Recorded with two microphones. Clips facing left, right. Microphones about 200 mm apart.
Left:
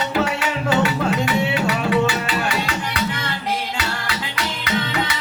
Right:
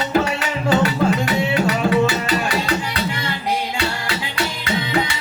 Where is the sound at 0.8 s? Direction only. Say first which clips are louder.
Right 1 dB; 40° right (ahead or behind).